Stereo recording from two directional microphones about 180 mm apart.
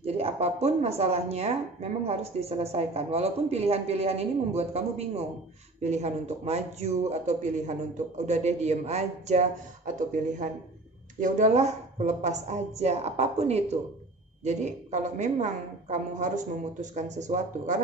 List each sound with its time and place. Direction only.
0.0 s speech: 35° right (ahead or behind)